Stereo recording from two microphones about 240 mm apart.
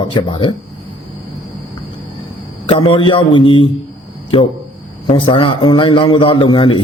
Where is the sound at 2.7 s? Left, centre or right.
Left.